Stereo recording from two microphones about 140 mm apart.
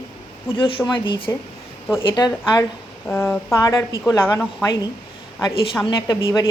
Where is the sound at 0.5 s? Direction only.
40° left (ahead or behind).